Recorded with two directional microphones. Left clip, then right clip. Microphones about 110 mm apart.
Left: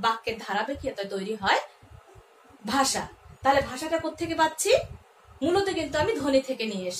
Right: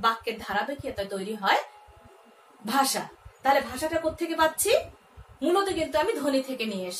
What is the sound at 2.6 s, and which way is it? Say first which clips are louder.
A woman's voice: even; 25° left (ahead or behind).